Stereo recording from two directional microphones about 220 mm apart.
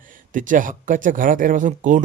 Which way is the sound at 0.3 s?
35° right (ahead or behind).